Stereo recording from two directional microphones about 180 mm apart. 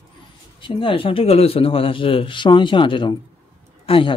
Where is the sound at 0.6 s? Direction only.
30° left (ahead or behind).